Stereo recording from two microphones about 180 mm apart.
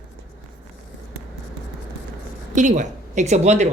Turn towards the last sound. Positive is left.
turn(degrees=-40)  # may be behind; listen again after turning